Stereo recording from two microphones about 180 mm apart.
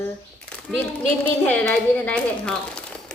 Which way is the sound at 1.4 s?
10° left (ahead or behind).